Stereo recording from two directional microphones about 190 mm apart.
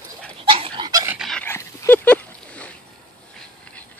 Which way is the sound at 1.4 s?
10° left (ahead or behind).